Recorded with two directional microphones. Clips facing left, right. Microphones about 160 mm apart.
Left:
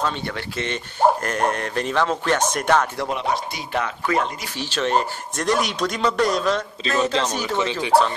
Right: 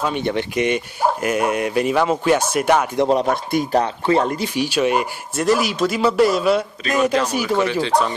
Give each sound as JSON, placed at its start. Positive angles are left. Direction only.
{"t": 0.0, "sound": "speech", "side_deg": -20}
{"t": 3.1, "sound": "speech", "side_deg": -45}
{"t": 3.8, "sound": "speech", "side_deg": -30}
{"t": 4.6, "sound": "speech", "side_deg": -10}
{"t": 7.9, "sound": "speech", "side_deg": 5}